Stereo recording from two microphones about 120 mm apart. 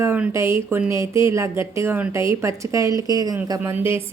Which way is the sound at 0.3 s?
25° right (ahead or behind).